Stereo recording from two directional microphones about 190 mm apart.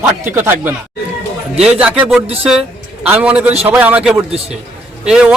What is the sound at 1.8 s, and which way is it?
A man's voice, 5° right (ahead or behind).